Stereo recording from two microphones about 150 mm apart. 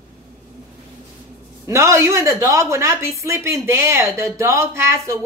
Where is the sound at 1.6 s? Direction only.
20° right (ahead or behind).